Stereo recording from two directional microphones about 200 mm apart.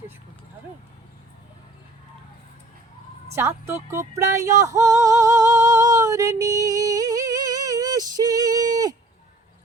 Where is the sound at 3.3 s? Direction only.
10° right (ahead or behind).